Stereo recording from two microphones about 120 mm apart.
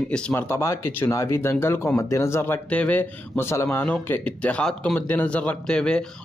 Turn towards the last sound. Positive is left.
turn(degrees=5)  # may be behind; listen again after turning